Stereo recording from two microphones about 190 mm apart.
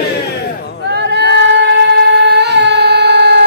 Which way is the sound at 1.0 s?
60° right (ahead or behind).